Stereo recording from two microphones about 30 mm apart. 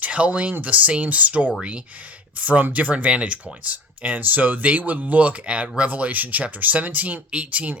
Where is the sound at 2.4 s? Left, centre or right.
Right.